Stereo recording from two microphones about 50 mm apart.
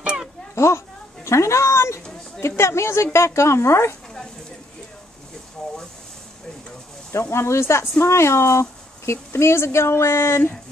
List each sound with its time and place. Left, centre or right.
0.6 s a woman's voice: left
5.6 s a sound: centre
7.1 s a woman's voice: left